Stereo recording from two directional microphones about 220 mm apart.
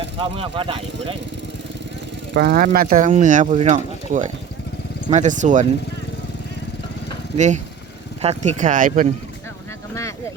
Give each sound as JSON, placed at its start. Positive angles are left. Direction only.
{"t": 0.2, "sound": "speech", "side_deg": -25}
{"t": 2.3, "sound": "speech", "side_deg": -45}
{"t": 7.3, "sound": "speech", "side_deg": -35}